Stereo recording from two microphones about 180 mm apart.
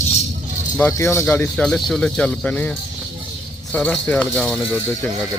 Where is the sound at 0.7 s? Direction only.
10° left (ahead or behind).